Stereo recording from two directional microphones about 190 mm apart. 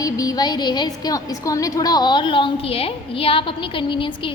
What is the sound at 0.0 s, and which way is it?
A woman's voice, 20° left (ahead or behind).